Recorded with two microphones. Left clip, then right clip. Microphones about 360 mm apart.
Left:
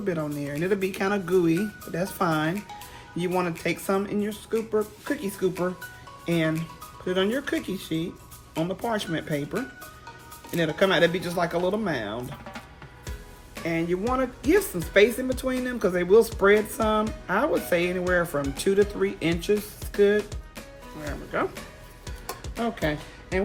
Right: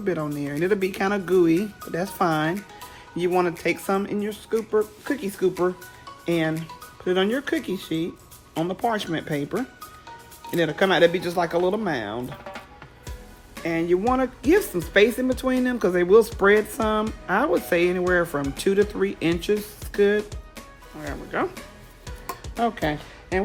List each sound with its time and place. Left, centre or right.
0.0 s speech: right
13.7 s speech: right
21.3 s speech: right
22.8 s speech: right
23.3 s speech: centre